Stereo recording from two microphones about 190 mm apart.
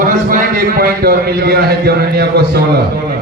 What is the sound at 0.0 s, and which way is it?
A man's voice, 45° right (ahead or behind).